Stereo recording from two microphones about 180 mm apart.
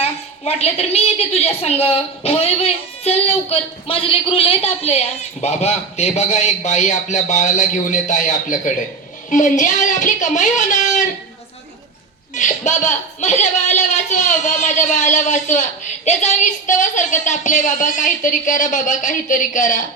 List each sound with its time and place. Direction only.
0.0 s a woman's voice: 35° left (ahead or behind)
12.3 s a woman's voice: 40° left (ahead or behind)